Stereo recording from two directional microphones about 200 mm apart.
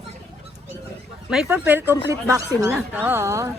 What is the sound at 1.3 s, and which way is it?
Speech, 10° right (ahead or behind).